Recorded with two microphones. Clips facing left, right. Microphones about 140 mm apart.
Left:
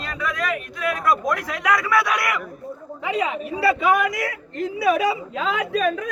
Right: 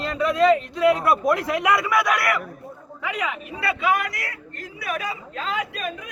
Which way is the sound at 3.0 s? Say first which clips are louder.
Left 4 dB; 25° left (ahead or behind).